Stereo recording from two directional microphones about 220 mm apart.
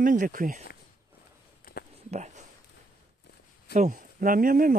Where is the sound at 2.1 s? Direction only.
30° right (ahead or behind).